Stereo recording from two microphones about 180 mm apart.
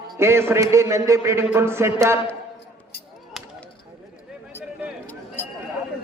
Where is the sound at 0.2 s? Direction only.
15° right (ahead or behind).